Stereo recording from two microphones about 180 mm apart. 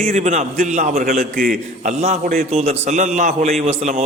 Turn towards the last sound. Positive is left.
turn(degrees=-40)  # may be behind; listen again after turning